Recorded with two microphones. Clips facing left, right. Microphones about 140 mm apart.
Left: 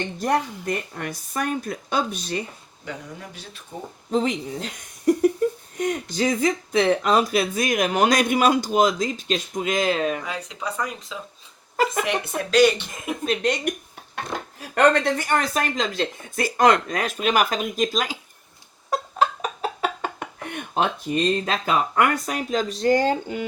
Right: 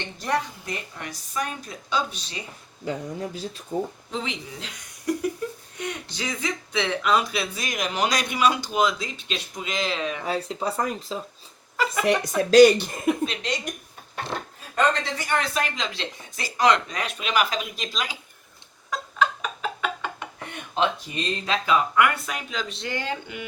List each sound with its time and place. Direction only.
0.2 s speech: 50° left (ahead or behind)
2.8 s speech: 35° right (ahead or behind)
4.1 s speech: 40° left (ahead or behind)
10.2 s speech: 35° right (ahead or behind)
13.2 s speech: 50° left (ahead or behind)
14.3 s speech: 70° left (ahead or behind); by 18.2 s 45° left (ahead or behind)
18.9 s a sound: 40° left (ahead or behind)